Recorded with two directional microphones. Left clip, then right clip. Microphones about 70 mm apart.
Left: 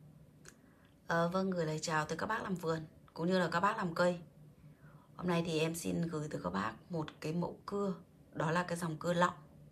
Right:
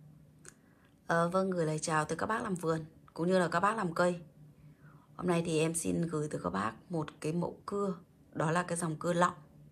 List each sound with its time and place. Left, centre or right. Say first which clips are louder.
1.0 s speech: right 4 dB; left